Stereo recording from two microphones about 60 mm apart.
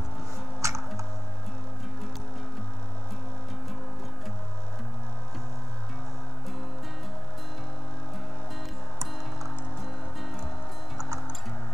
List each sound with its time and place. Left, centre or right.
0.6 s music: right